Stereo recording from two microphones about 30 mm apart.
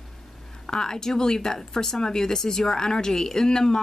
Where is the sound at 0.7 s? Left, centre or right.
Left.